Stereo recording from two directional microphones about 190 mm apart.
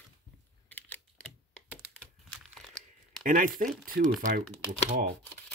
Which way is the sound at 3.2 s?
45° right (ahead or behind).